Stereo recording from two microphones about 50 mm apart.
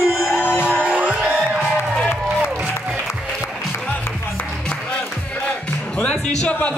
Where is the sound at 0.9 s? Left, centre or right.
Right.